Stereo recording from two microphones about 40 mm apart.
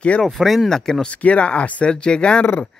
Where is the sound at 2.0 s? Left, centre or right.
Left.